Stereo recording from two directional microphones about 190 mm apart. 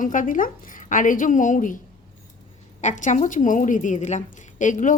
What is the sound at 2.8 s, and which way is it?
A woman's voice, 40° left (ahead or behind).